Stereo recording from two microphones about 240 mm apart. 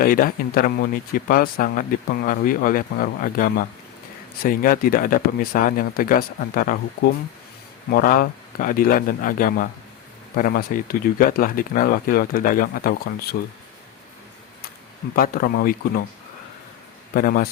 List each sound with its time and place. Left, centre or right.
0.0 s speech: left
7.9 s speech: left
15.1 s speech: left
17.2 s speech: left